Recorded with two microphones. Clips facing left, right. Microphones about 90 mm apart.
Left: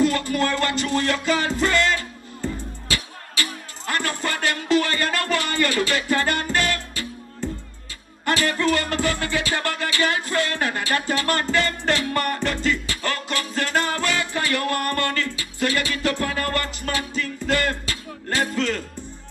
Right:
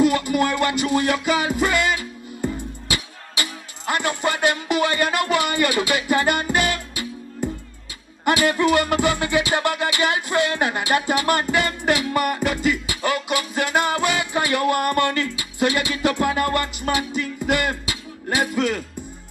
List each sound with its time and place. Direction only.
0.0 s music: 15° right (ahead or behind)